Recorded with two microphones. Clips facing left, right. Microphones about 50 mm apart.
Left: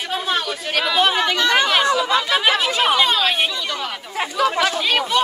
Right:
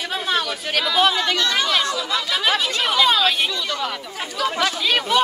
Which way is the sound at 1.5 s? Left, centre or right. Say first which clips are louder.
Left 4 dB; left.